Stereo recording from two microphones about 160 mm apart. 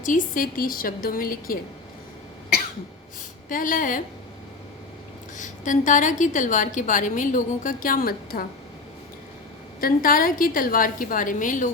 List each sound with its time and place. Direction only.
0.0 s a woman's voice: 55° left (ahead or behind)
3.5 s a woman's voice: 55° left (ahead or behind)
5.4 s a woman's voice: 50° left (ahead or behind)
9.8 s a woman's voice: 60° left (ahead or behind)